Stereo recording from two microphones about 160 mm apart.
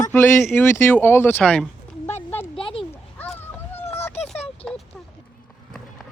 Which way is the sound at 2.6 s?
35° left (ahead or behind).